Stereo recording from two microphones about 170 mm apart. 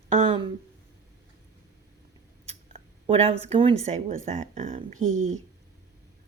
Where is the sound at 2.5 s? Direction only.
35° right (ahead or behind).